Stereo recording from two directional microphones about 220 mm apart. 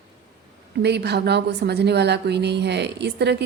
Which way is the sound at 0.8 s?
50° right (ahead or behind).